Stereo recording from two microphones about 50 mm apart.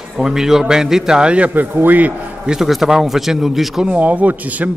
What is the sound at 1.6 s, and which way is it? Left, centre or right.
Speech, right.